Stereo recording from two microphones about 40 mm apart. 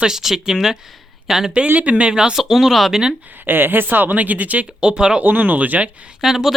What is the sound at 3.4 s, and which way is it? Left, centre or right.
Speech, right.